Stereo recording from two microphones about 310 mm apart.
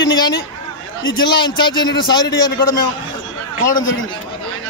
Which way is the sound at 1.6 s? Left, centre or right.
Centre.